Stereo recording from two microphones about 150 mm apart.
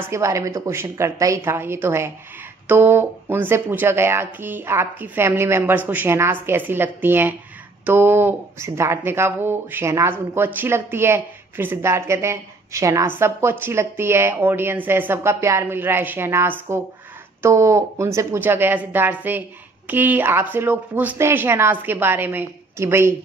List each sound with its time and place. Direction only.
0.0 s speech: 20° right (ahead or behind)